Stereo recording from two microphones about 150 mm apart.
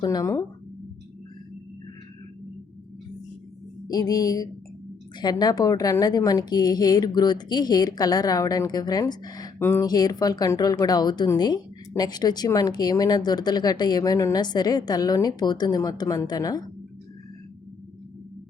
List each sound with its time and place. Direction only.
0.0 s a woman's voice: 25° left (ahead or behind)
3.8 s a woman's voice: 25° left (ahead or behind)